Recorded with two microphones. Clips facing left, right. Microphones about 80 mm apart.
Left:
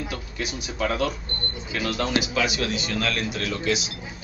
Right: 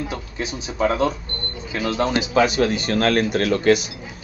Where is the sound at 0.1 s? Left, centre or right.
Right.